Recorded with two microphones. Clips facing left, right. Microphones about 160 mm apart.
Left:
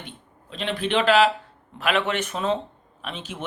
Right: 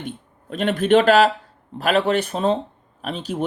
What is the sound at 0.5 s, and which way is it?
Speech, 45° right (ahead or behind).